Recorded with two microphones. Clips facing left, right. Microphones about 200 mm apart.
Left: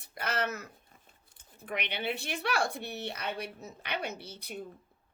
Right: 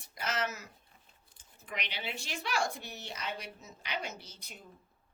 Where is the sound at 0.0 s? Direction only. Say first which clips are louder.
Left 2 dB; 60° left (ahead or behind).